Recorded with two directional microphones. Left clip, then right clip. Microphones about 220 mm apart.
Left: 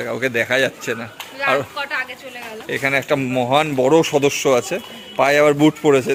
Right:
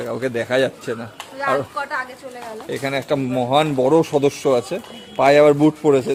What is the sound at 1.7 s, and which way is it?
Speech, 25° right (ahead or behind).